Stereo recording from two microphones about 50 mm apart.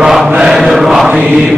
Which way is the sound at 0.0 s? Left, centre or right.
Centre.